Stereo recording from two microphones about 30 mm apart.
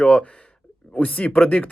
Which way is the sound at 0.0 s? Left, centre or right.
Left.